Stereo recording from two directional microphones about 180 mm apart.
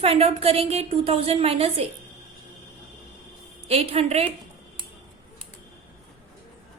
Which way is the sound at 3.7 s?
35° right (ahead or behind).